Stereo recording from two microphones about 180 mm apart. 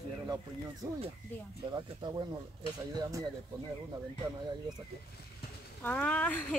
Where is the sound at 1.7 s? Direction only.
25° right (ahead or behind).